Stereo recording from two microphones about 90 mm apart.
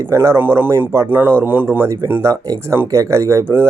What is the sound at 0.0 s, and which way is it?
Speech, 35° right (ahead or behind).